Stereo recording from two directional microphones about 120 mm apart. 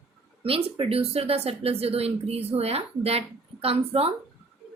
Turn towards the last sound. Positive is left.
turn(degrees=-55)  # may be behind; listen again after turning